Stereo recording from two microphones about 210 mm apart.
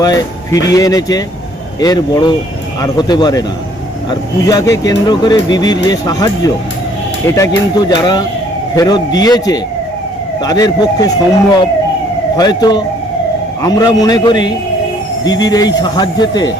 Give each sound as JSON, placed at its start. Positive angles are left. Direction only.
{"t": 0.0, "sound": "speech", "side_deg": 15}
{"t": 12.4, "sound": "speech", "side_deg": 20}